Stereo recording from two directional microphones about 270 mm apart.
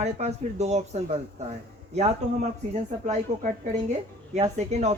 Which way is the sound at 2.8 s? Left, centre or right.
Right.